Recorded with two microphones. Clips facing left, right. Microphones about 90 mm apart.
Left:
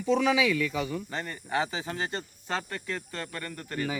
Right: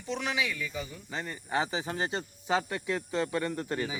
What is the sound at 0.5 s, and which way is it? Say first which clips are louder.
Speech: left 8 dB; 85° left.